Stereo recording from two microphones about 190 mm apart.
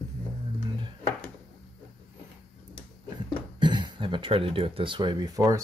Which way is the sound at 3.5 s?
25° right (ahead or behind).